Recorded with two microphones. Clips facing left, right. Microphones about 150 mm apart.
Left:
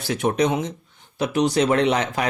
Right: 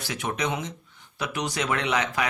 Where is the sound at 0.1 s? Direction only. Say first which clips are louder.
Left 8 dB; 35° left (ahead or behind).